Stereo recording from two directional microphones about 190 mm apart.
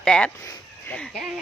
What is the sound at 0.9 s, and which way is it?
Speech, 5° left (ahead or behind).